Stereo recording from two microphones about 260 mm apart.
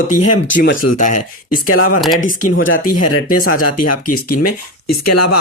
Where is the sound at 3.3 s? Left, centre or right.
Left.